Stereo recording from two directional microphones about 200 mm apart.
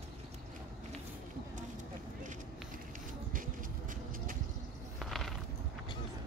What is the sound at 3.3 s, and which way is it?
Vehicle, 45° right (ahead or behind).